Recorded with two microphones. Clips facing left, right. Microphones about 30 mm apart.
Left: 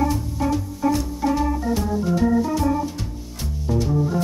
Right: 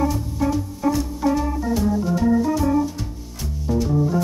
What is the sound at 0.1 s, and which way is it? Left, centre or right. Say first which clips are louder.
Organ: even; centre.